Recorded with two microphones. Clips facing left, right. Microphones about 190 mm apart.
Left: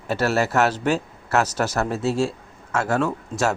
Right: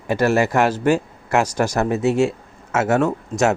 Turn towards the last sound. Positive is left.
turn(degrees=-15)  # may be behind; listen again after turning